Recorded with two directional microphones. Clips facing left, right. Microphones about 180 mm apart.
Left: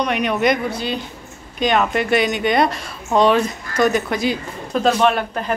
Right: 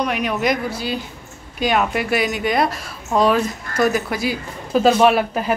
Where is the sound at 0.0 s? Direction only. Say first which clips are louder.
Left 2 dB; 5° right (ahead or behind).